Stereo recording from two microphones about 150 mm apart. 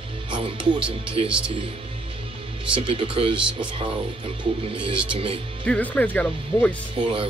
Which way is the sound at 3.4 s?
5° right (ahead or behind).